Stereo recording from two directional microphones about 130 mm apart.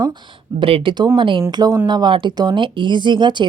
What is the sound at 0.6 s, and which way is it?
Speech, 40° right (ahead or behind).